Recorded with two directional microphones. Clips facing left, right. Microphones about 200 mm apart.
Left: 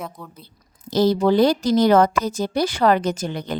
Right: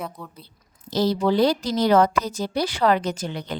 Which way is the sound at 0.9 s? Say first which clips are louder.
Left 4 dB; 50° left (ahead or behind).